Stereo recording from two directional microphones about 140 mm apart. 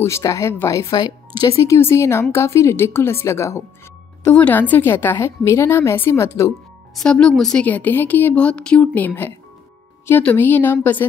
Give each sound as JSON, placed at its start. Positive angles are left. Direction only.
{"t": 0.0, "sound": "speech", "side_deg": 20}
{"t": 7.0, "sound": "speech", "side_deg": 5}